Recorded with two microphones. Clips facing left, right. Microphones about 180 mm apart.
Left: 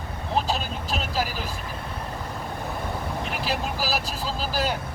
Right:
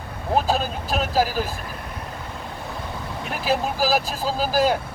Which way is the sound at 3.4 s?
45° right (ahead or behind).